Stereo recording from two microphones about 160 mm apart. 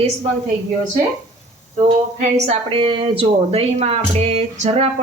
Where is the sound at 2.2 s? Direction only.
45° right (ahead or behind).